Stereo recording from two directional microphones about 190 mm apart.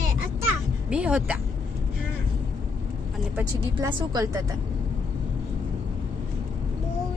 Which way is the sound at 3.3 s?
15° right (ahead or behind).